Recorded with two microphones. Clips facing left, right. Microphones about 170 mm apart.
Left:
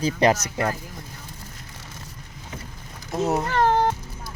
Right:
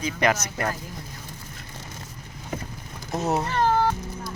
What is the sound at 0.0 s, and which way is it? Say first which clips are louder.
Speech: left 4 dB; 35° left (ahead or behind).